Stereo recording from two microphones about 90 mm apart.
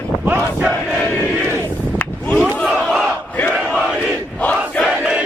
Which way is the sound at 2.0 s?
20° left (ahead or behind).